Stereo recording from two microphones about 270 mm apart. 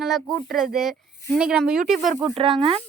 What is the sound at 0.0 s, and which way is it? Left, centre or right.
A woman's voice, centre.